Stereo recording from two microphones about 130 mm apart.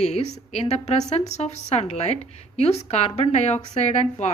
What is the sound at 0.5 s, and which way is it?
Speech, 55° left (ahead or behind).